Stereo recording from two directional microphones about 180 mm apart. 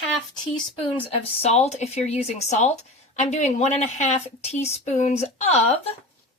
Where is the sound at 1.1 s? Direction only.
35° left (ahead or behind).